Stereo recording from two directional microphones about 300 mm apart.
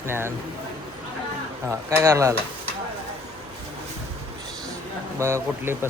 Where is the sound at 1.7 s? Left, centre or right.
Centre.